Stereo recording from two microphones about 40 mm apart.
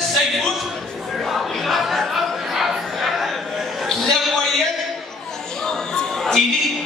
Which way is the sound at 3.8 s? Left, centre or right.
Centre.